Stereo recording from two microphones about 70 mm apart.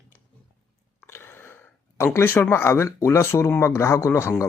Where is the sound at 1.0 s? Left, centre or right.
Left.